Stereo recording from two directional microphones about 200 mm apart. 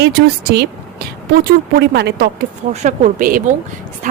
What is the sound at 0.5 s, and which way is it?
Speech, 55° right (ahead or behind).